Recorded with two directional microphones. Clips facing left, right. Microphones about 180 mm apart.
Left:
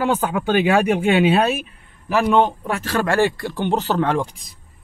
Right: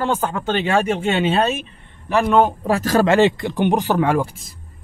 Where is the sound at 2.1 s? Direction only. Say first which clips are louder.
Right 1 dB; centre (ahead or behind).